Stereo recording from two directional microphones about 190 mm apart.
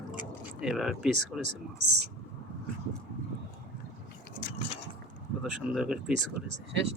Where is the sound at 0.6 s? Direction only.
Centre (ahead or behind).